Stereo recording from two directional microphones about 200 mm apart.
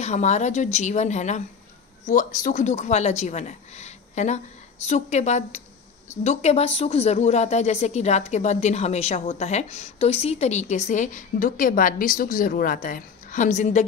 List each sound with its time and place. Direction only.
0.0 s speech: 35° left (ahead or behind)